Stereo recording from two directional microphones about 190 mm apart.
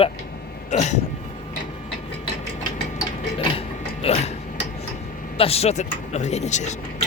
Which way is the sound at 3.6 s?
30° left (ahead or behind).